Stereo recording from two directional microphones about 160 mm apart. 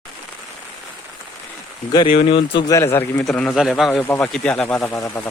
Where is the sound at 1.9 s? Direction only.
35° left (ahead or behind).